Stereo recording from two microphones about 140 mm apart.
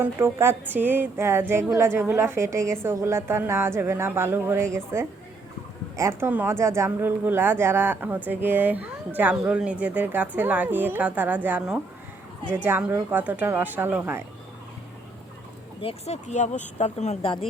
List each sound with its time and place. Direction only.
0.0 s speech: 20° right (ahead or behind)
15.8 s speech: 40° left (ahead or behind)
16.2 s speech: 60° left (ahead or behind)